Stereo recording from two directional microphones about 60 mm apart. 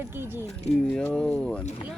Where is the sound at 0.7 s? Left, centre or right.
Centre.